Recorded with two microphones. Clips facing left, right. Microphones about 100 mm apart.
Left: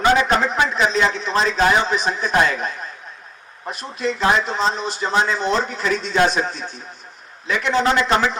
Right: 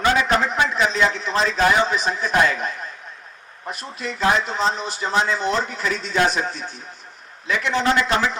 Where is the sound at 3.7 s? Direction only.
20° left (ahead or behind).